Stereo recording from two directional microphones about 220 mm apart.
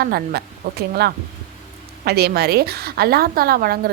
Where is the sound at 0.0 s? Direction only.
45° right (ahead or behind).